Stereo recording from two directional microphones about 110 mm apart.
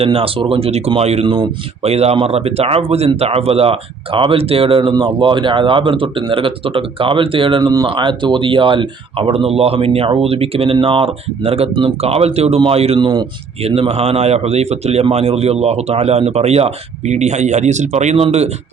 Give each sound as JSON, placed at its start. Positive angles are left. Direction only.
{"t": 0.0, "sound": "speech", "side_deg": -60}
{"t": 13.0, "sound": "speech", "side_deg": -40}
{"t": 13.6, "sound": "speech", "side_deg": -65}